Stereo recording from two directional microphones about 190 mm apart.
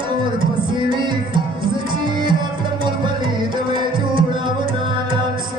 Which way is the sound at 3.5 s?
25° right (ahead or behind).